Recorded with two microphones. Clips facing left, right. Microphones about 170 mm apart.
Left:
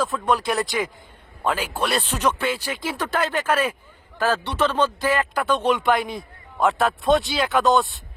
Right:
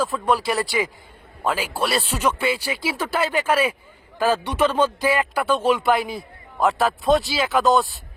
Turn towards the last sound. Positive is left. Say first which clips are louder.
# right 1 dB
turn(degrees=0)  # may be behind; listen again after turning